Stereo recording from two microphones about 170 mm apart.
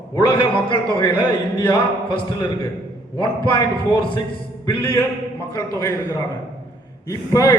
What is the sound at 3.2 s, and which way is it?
A man's voice, 25° left (ahead or behind).